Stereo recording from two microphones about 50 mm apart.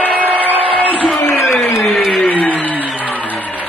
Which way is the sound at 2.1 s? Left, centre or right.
Left.